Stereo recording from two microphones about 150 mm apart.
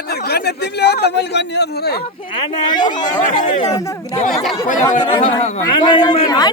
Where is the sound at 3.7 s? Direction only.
25° left (ahead or behind).